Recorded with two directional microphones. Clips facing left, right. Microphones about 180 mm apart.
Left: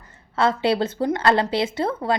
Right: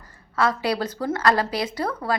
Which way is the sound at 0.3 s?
25° left (ahead or behind).